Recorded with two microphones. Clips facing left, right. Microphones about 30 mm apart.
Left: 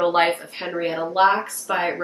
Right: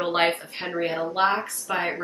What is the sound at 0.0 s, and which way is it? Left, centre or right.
Speech, centre.